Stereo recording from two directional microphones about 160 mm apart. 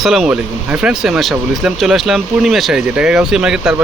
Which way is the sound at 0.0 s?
Centre (ahead or behind).